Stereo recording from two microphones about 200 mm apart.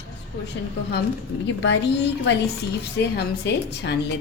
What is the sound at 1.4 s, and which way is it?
A woman's voice, 65° left (ahead or behind).